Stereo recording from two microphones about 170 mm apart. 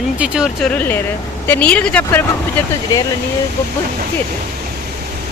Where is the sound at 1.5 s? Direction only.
10° left (ahead or behind).